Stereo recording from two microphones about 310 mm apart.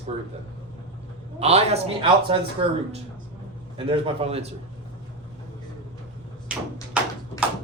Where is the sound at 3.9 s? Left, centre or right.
Centre.